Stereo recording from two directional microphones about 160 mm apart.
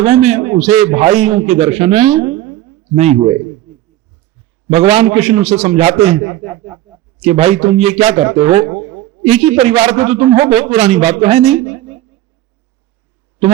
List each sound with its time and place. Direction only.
0.0 s a man's voice: 45° right (ahead or behind)
4.7 s a man's voice: 40° right (ahead or behind)
8.6 s speech: 20° right (ahead or behind)
9.0 s a man's voice: 40° right (ahead or behind)
11.8 s a sound: 40° right (ahead or behind)